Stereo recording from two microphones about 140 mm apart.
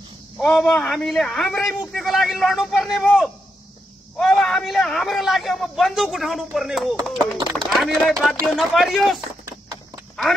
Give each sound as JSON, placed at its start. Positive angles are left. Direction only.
{"t": 0.5, "sound": "a man's voice", "side_deg": 5}